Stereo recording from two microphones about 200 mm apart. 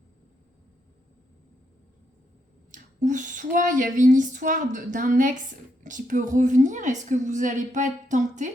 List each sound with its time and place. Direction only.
2.7 s a woman's voice: 40° right (ahead or behind)